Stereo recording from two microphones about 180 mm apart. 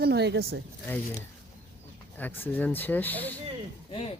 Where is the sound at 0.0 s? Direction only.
65° right (ahead or behind).